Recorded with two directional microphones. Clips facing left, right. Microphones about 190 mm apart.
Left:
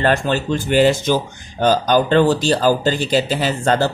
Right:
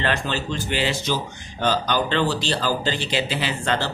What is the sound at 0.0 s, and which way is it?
Speech, 45° left (ahead or behind).